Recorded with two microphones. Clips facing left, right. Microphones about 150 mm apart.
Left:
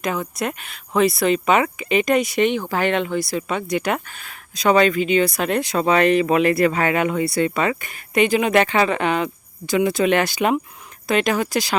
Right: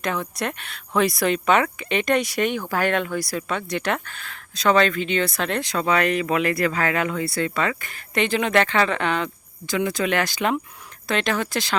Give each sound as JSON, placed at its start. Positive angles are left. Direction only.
{"t": 0.0, "sound": "speech", "side_deg": 5}